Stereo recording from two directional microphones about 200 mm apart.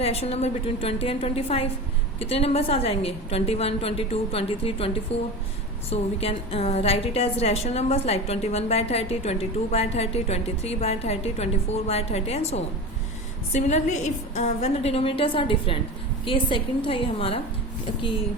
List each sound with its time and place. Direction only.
0.0 s a woman's voice: 30° left (ahead or behind)